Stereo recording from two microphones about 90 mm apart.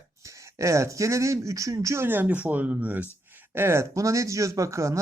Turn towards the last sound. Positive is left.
turn(degrees=-35)  # may be behind; listen again after turning